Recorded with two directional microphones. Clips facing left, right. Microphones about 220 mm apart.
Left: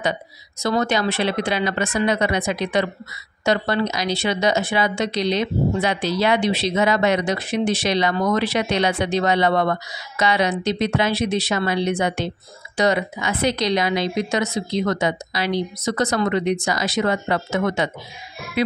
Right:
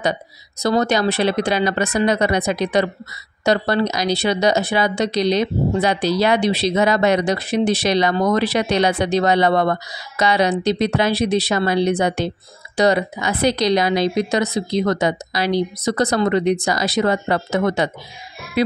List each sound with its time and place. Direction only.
0.6 s speech: 40° right (ahead or behind)